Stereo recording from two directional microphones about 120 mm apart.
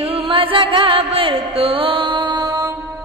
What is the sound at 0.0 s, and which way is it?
Music, 50° right (ahead or behind).